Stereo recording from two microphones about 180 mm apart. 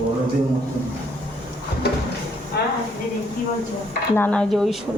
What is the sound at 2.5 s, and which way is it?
Speech, 60° left (ahead or behind).